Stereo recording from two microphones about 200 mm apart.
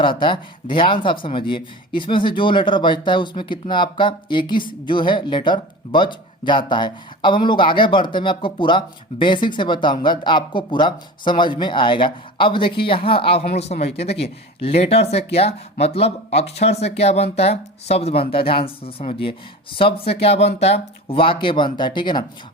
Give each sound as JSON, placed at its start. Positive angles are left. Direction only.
{"t": 0.0, "sound": "speech", "side_deg": 25}